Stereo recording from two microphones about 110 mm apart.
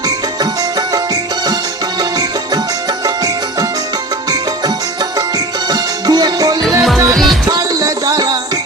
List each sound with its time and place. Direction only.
0.8 s music: 40° right (ahead or behind)
5.7 s music: 40° right (ahead or behind)
6.6 s music: centre (ahead or behind)
7.4 s music: 35° right (ahead or behind)